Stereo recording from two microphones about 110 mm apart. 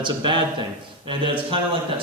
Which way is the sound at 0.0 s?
45° right (ahead or behind).